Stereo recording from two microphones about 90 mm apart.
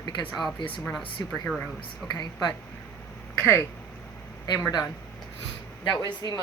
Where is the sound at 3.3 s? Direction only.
25° left (ahead or behind).